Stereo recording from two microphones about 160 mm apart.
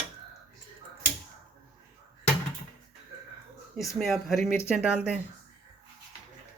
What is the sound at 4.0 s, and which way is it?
Speech, centre (ahead or behind).